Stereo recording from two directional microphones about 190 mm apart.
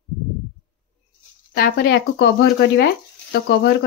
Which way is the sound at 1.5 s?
50° left (ahead or behind).